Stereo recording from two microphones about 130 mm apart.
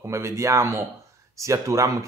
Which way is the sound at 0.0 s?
20° right (ahead or behind).